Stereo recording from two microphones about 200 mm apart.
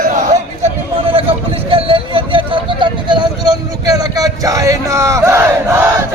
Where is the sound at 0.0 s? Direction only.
40° right (ahead or behind).